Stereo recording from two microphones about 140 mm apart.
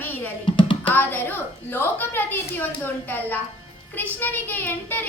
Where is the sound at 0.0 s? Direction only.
15° left (ahead or behind).